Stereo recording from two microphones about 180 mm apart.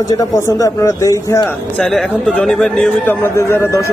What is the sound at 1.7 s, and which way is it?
A man's voice, 5° left (ahead or behind).